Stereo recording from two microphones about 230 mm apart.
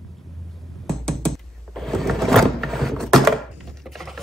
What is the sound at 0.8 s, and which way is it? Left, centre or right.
Computer keyboard, centre.